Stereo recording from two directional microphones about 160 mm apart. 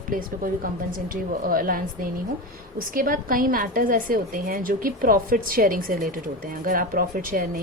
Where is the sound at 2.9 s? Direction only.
60° right (ahead or behind).